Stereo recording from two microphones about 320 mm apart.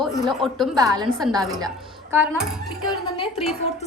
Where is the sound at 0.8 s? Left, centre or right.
Centre.